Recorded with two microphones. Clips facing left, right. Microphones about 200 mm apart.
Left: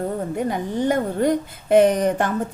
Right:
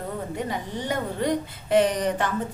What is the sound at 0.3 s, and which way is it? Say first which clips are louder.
A woman's voice: left 7 dB; 50° left (ahead or behind).